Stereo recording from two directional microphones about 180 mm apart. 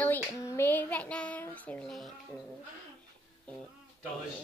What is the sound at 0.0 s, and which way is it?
Child singing, 10° left (ahead or behind).